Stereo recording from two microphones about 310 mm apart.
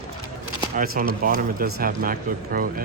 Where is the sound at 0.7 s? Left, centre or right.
Right.